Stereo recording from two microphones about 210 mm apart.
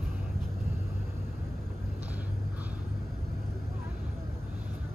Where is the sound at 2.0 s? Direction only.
10° right (ahead or behind).